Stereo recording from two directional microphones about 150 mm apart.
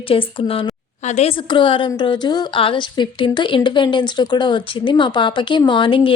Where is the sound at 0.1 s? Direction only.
35° left (ahead or behind).